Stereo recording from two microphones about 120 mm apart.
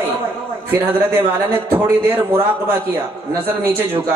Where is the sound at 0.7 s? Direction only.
15° right (ahead or behind).